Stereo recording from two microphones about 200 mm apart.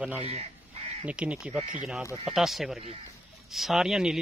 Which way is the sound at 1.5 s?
40° right (ahead or behind).